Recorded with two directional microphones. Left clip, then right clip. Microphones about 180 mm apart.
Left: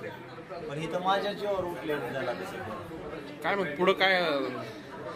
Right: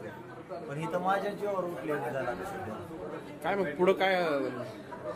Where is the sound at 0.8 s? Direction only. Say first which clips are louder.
Left 2 dB; 5° right (ahead or behind).